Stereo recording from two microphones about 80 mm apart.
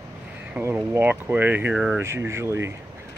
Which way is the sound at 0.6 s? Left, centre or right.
Right.